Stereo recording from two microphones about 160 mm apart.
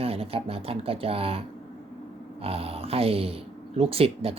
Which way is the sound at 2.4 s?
35° right (ahead or behind).